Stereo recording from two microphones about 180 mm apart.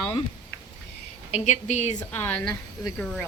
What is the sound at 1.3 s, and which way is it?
Speech, 40° left (ahead or behind).